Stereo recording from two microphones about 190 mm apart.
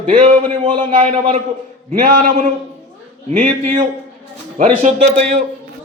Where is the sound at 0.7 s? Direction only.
40° right (ahead or behind).